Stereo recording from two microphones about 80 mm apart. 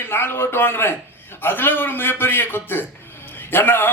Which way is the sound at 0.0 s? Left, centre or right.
Left.